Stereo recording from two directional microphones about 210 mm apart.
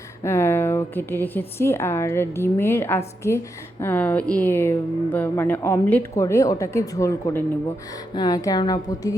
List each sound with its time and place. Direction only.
0.2 s speech: 10° left (ahead or behind)